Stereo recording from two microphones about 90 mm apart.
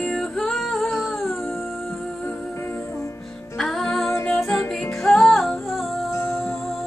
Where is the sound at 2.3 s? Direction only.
25° left (ahead or behind).